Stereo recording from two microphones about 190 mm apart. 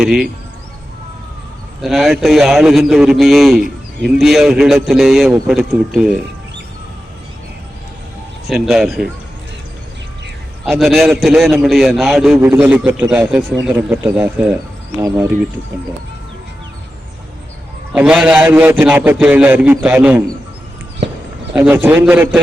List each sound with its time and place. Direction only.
0.0 s a man's voice: 5° right (ahead or behind)
1.8 s a man's voice: centre (ahead or behind)
8.4 s a man's voice: centre (ahead or behind)
10.7 s a man's voice: centre (ahead or behind)
14.9 s a man's voice: 15° right (ahead or behind)
17.9 s a man's voice: 5° right (ahead or behind)
21.5 s a man's voice: 10° right (ahead or behind)